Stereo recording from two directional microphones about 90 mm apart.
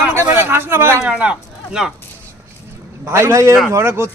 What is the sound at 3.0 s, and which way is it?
A man's voice, 30° right (ahead or behind).